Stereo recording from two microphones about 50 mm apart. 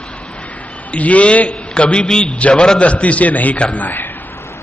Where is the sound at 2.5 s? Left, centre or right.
Centre.